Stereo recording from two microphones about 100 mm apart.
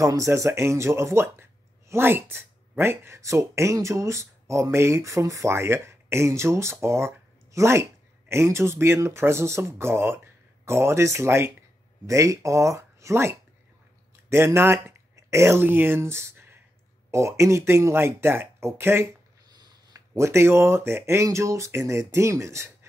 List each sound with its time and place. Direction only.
0.0 s speech: 30° right (ahead or behind)